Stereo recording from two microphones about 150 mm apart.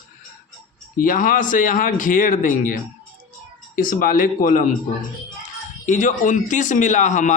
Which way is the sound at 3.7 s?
70° left (ahead or behind).